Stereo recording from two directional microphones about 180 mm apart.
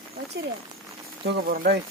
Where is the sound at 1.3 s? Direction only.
55° right (ahead or behind).